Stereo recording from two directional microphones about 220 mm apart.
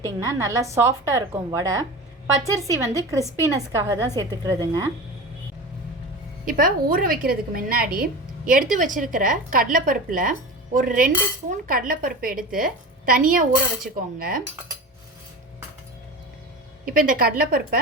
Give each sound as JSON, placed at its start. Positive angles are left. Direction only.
{"t": 0.0, "sound": "a woman's voice", "side_deg": -15}
{"t": 6.4, "sound": "a woman's voice", "side_deg": -40}
{"t": 16.8, "sound": "a woman's voice", "side_deg": -40}